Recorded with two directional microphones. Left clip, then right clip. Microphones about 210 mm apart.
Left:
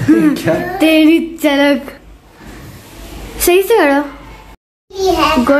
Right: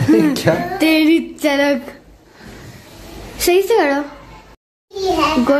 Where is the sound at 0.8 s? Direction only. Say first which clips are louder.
Left 5 dB; centre (ahead or behind).